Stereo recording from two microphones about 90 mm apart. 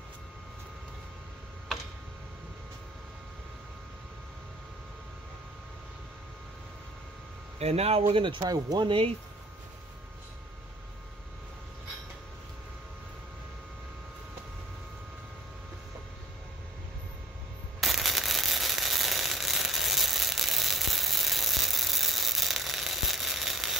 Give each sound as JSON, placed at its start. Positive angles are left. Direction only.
{"t": 8.1, "sound": "speech", "side_deg": -70}
{"t": 8.5, "sound": "speech", "side_deg": -45}
{"t": 8.8, "sound": "speech", "side_deg": -90}
{"t": 17.7, "sound": "a sound", "side_deg": 0}